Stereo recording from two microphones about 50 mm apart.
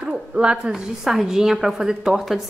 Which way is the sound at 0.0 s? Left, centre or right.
Centre.